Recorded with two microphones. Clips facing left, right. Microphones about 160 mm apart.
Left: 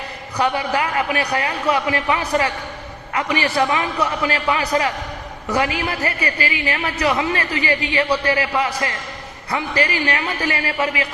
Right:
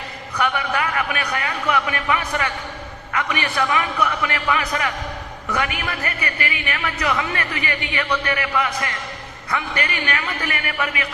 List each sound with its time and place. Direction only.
0.3 s a woman's voice: 30° left (ahead or behind)